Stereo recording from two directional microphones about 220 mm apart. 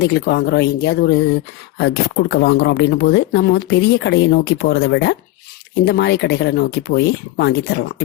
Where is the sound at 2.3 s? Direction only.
50° left (ahead or behind).